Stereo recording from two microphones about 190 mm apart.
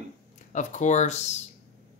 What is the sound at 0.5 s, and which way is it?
Speech, 40° left (ahead or behind).